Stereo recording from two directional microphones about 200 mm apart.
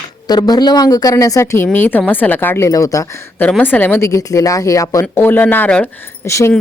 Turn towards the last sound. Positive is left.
turn(degrees=15)  # may be behind; listen again after turning